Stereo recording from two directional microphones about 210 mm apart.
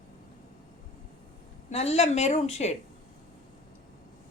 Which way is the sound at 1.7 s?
30° left (ahead or behind).